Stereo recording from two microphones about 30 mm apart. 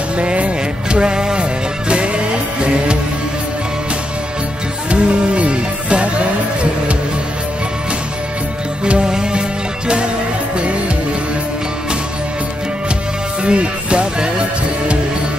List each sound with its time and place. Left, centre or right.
0.2 s music: right
4.8 s music: right
8.8 s music: right
9.8 s music: right
13.4 s music: right